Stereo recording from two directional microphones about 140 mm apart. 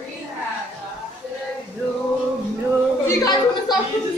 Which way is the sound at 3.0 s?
25° left (ahead or behind).